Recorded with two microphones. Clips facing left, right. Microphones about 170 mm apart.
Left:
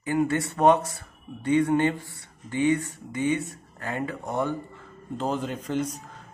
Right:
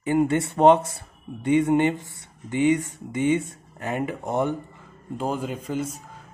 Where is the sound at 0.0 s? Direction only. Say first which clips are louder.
Right 3 dB; 25° right (ahead or behind).